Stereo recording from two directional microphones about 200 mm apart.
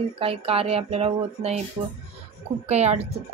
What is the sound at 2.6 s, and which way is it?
Speech, 35° right (ahead or behind).